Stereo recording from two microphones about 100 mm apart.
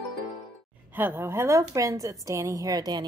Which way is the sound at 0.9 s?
20° right (ahead or behind).